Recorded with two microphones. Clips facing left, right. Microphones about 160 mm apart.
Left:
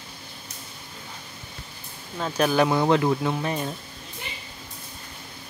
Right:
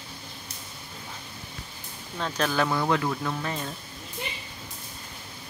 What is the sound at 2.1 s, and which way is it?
Speech, 10° left (ahead or behind).